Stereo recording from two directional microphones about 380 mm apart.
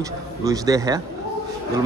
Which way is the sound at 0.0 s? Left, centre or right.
Centre.